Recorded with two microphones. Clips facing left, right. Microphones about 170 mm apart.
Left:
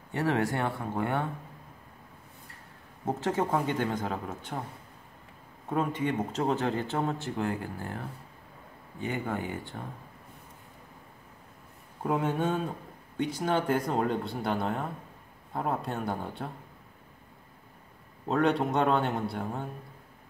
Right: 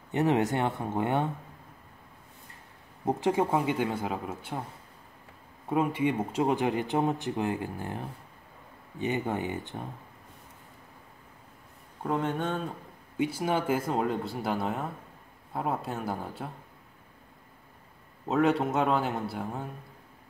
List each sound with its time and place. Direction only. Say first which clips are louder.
0.1 s speech: right 3 dB; 20° right (ahead or behind)
3.1 s a man's voice: right 2 dB; 15° right (ahead or behind)
5.7 s a man's voice: right 2 dB; 10° right (ahead or behind)
12.0 s speech: left 1 dB; 5° left (ahead or behind)
13.2 s speech: even; 10° right (ahead or behind)
18.3 s speech: right 1 dB; centre (ahead or behind)